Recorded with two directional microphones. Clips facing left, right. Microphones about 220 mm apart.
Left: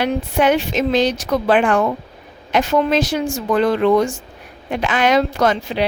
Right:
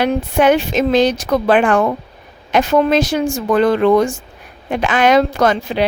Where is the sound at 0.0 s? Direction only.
50° right (ahead or behind).